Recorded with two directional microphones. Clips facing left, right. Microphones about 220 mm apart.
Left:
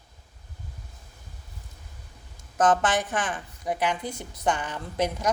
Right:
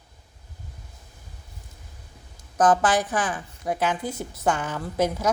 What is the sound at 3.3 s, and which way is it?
A woman's voice, 5° right (ahead or behind).